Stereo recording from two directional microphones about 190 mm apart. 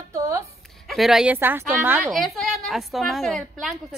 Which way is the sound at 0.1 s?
15° right (ahead or behind).